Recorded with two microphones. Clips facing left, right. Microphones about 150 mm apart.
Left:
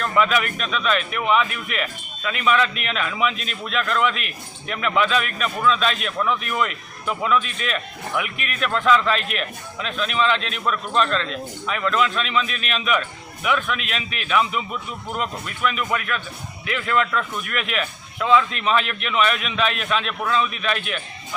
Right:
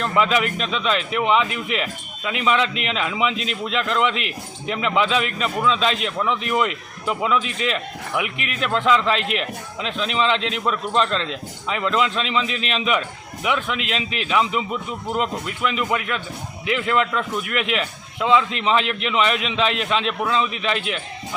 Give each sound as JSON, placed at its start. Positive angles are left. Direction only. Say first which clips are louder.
{"t": 0.0, "sound": "a man's voice", "louder": "right 1 dB", "side_deg": -20}